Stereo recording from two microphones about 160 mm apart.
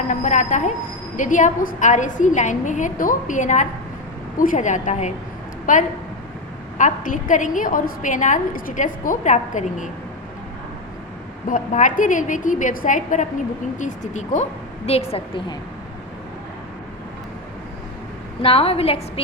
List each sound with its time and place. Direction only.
0.1 s a sound: 50° left (ahead or behind)
1.1 s a woman's voice: 50° left (ahead or behind)
11.4 s a woman's voice: 55° left (ahead or behind)
14.8 s a woman's voice: 40° left (ahead or behind)
18.4 s a woman's voice: 35° left (ahead or behind)